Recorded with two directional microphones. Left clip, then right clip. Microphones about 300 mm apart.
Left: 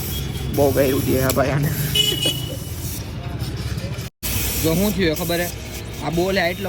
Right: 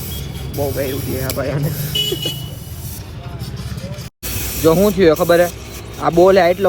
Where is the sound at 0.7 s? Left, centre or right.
Left.